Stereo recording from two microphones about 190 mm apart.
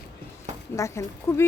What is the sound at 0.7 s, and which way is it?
Speech, 15° left (ahead or behind).